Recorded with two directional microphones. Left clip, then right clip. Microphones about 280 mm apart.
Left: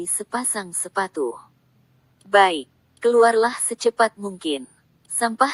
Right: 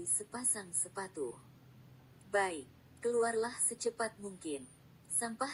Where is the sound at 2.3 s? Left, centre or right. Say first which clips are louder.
Left 18 dB; left.